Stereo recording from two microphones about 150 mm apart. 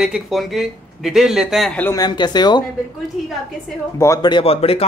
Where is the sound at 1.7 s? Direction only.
10° left (ahead or behind).